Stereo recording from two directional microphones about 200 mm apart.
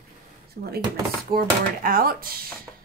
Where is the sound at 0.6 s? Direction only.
55° right (ahead or behind).